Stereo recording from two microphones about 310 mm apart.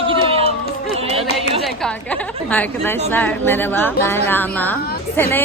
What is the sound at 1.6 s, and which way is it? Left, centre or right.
A woman's voice, centre.